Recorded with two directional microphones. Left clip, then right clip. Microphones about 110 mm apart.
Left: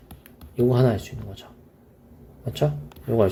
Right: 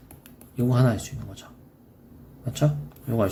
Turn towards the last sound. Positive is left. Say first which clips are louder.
# left 5 dB
turn(degrees=30)  # may be behind; listen again after turning